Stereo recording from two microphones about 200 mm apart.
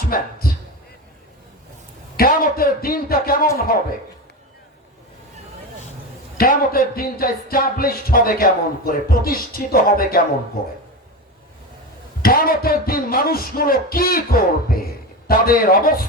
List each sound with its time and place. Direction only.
0.1 s a sound: 50° left (ahead or behind)
2.1 s music: 45° left (ahead or behind)
6.3 s music: 45° left (ahead or behind)
12.2 s music: 45° left (ahead or behind)